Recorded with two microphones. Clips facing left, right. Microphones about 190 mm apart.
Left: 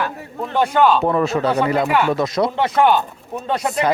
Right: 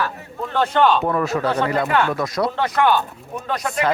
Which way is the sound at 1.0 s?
25° left (ahead or behind).